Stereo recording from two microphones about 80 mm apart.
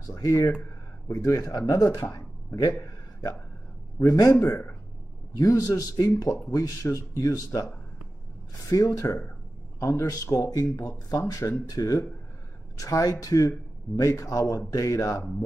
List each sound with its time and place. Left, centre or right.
0.0 s speech: left
2.0 s a sound: left
4.0 s speech: left
8.6 s speech: left